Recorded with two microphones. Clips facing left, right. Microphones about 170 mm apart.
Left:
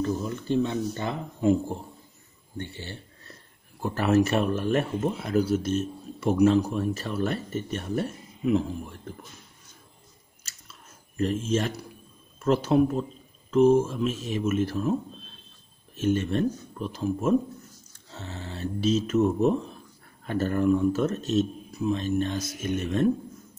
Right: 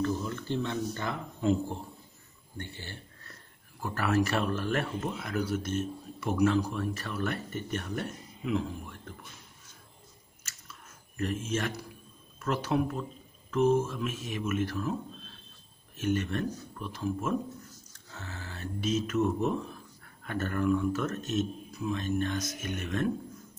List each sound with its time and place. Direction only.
0.0 s speech: 20° left (ahead or behind)
2.5 s a sound: 20° left (ahead or behind)
3.8 s speech: 25° left (ahead or behind)
10.4 s chewing: 25° left (ahead or behind)
12.4 s speech: 25° left (ahead or behind)
16.0 s speech: 25° left (ahead or behind)